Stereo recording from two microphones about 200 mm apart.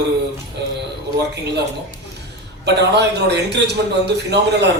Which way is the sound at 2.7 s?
55° right (ahead or behind).